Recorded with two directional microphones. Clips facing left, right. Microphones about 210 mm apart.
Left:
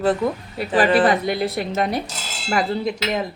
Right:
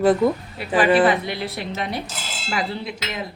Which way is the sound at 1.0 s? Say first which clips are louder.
Left 2 dB; 45° left (ahead or behind).